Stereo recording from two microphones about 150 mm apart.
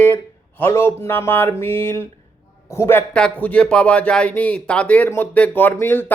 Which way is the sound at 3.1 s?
5° left (ahead or behind).